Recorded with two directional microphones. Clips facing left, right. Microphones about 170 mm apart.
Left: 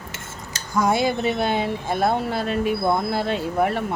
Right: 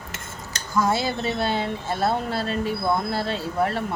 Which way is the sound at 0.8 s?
15° left (ahead or behind).